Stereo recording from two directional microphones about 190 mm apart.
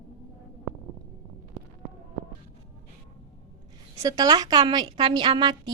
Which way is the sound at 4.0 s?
20° right (ahead or behind).